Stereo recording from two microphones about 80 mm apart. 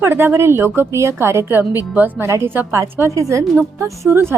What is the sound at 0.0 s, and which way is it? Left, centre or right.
A woman's voice, right.